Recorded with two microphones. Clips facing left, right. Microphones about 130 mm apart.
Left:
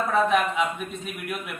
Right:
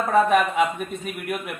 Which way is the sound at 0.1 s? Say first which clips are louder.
Right 5 dB; 55° right (ahead or behind).